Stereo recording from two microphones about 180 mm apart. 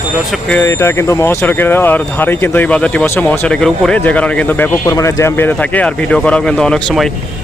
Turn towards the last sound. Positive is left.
turn(degrees=5)  # may be behind; listen again after turning